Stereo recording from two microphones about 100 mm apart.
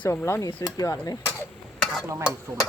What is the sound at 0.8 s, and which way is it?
Speech, 40° left (ahead or behind).